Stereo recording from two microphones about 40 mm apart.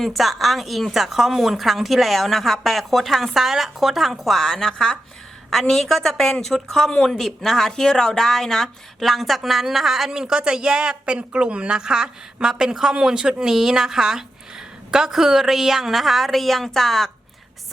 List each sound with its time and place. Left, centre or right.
0.0 s a woman's voice: centre
3.3 s a woman's voice: centre